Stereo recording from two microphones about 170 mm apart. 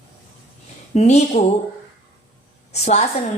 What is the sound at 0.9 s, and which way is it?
Speech, 40° left (ahead or behind).